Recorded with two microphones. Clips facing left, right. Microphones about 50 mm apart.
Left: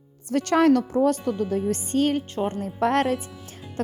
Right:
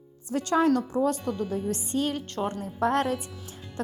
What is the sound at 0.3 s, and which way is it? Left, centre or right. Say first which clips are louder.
Speech: left 4 dB; left.